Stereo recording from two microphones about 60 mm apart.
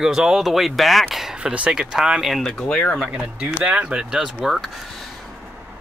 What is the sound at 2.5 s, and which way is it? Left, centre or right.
Speech, centre.